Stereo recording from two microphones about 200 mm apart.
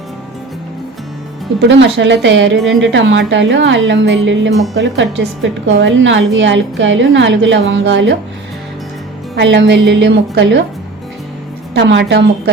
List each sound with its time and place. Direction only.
1.6 s a woman's voice: 65° right (ahead or behind)
9.3 s a woman's voice: 60° right (ahead or behind)
11.7 s a woman's voice: 60° right (ahead or behind)